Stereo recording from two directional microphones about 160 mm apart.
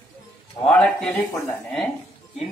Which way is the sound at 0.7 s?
5° left (ahead or behind).